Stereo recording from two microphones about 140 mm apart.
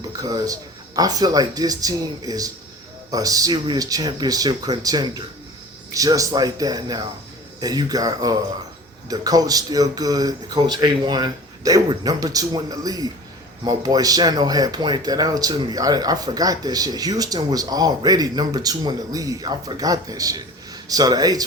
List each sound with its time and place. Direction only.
0.2 s speech: 25° right (ahead or behind)